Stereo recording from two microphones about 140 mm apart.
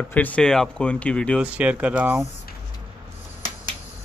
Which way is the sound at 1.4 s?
10° right (ahead or behind).